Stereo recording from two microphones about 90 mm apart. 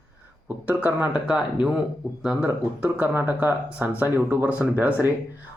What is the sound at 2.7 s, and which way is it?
Speech, 15° right (ahead or behind).